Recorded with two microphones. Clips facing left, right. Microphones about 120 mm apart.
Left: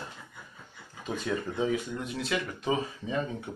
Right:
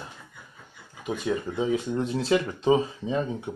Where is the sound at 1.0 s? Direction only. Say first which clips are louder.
Right 4 dB; 15° right (ahead or behind).